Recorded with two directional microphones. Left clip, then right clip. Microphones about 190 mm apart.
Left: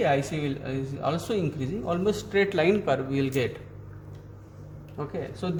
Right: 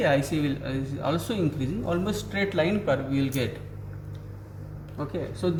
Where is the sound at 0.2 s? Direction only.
40° left (ahead or behind).